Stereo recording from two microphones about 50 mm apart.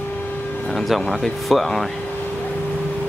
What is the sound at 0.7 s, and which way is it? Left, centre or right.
Speech, centre.